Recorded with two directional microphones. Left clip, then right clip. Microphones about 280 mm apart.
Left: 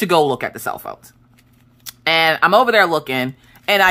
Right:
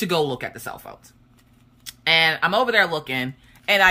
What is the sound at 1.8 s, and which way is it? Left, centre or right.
Speech, centre.